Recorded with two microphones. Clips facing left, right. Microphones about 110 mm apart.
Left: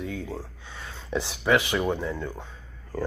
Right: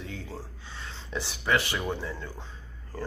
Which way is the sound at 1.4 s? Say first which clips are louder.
Left 5 dB; 15° left (ahead or behind).